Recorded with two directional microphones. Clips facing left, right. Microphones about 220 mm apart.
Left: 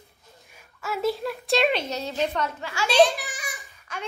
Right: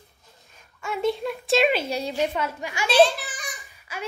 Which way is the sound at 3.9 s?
5° right (ahead or behind).